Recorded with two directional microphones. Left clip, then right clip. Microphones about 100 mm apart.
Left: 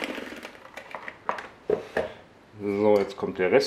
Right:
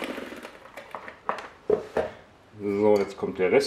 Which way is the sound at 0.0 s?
20° left (ahead or behind).